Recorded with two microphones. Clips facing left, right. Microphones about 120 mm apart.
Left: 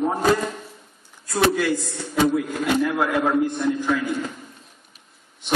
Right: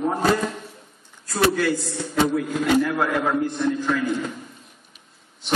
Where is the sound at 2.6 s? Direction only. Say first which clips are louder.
Right 2 dB; 15° left (ahead or behind).